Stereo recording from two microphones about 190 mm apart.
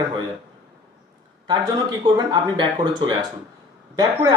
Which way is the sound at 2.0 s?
25° right (ahead or behind).